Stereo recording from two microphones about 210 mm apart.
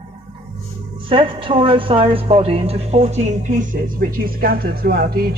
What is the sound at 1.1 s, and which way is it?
A woman's voice, 25° right (ahead or behind).